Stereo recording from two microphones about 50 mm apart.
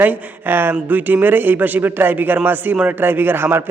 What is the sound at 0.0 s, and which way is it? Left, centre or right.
A man's voice, right.